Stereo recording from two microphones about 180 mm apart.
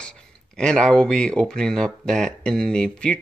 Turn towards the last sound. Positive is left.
turn(degrees=5)  # may be behind; listen again after turning